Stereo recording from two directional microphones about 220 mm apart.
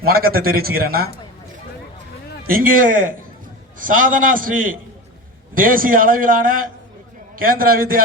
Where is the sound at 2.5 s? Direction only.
40° right (ahead or behind).